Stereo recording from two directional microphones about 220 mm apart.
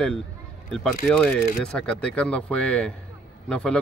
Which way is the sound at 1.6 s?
5° left (ahead or behind).